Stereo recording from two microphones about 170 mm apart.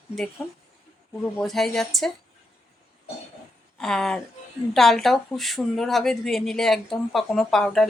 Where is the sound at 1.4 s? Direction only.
Centre (ahead or behind).